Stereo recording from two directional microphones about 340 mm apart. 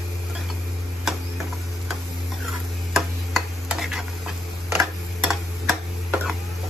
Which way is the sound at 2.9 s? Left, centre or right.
Centre.